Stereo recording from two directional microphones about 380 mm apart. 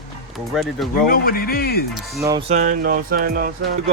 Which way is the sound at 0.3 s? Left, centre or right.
Centre.